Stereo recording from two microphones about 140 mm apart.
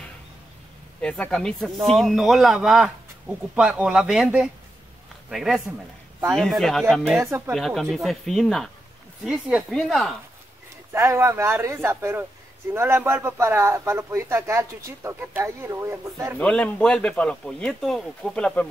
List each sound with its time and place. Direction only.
1.0 s speech: 5° left (ahead or behind)
7.2 s a man's voice: 20° right (ahead or behind)
7.5 s speech: centre (ahead or behind)
10.9 s a man's voice: 20° right (ahead or behind)
16.3 s speech: 10° left (ahead or behind)